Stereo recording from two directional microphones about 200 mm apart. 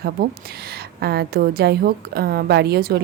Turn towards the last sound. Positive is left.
turn(degrees=-50)  # may be behind; listen again after turning